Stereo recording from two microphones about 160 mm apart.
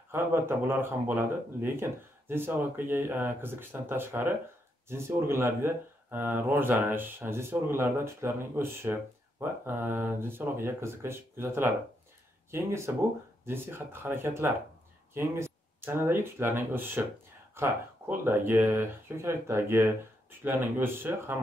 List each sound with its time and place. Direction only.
0.1 s speech: 15° right (ahead or behind)